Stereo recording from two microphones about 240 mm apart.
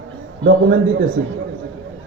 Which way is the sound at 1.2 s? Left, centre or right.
Right.